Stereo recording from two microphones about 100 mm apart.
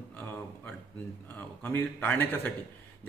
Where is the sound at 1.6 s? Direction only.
20° left (ahead or behind).